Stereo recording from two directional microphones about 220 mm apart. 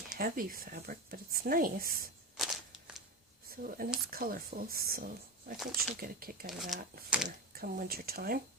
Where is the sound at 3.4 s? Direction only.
40° right (ahead or behind).